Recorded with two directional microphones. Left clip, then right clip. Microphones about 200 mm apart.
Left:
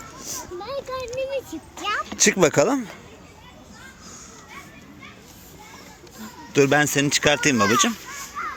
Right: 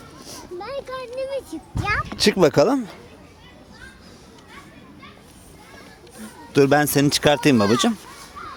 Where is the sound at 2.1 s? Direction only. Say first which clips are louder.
Right 1 dB; 20° right (ahead or behind).